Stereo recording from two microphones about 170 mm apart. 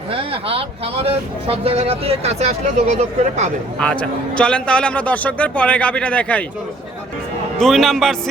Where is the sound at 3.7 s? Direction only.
5° left (ahead or behind).